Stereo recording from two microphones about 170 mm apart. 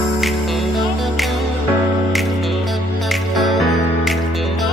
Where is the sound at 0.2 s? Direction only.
Centre (ahead or behind).